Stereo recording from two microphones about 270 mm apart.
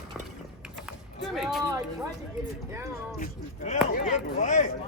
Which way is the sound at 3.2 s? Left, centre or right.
Left.